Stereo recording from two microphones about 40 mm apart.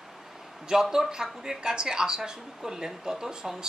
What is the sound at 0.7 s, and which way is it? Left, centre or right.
Speech, centre.